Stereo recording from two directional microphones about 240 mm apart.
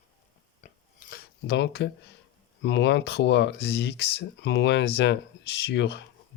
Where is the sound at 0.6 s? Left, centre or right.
Left.